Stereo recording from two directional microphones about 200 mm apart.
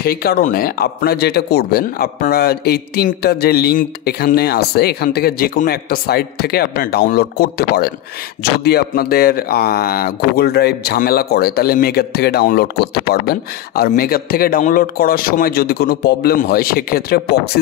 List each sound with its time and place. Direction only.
0.0 s speech: 50° left (ahead or behind)